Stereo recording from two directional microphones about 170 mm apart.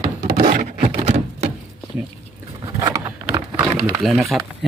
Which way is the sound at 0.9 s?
35° right (ahead or behind).